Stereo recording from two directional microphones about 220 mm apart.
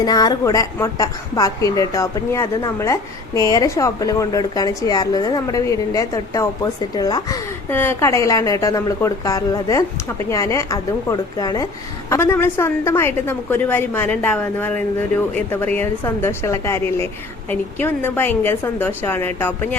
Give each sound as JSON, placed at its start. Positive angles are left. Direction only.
{"t": 0.0, "sound": "a woman's voice", "side_deg": 15}